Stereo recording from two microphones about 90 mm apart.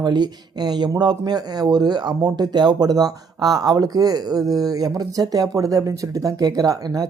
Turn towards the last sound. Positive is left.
turn(degrees=-45)  # may be behind; listen again after turning